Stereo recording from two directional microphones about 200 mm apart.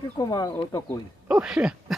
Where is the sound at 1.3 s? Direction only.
5° right (ahead or behind).